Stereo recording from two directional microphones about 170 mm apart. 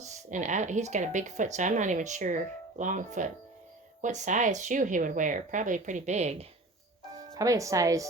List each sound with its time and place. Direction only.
0.1 s speech: 45° right (ahead or behind)
7.3 s speech: 20° right (ahead or behind)